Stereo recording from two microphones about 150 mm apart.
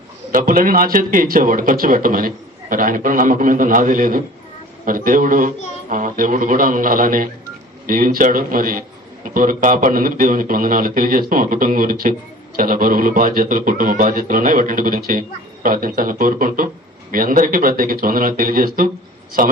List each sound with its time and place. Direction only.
0.3 s a man's voice: 65° right (ahead or behind)